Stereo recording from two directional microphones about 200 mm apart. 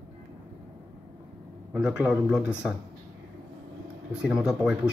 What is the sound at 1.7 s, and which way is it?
Speech, 5° right (ahead or behind).